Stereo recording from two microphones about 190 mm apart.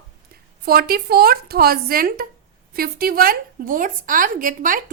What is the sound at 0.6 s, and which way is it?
A woman's voice, 55° right (ahead or behind).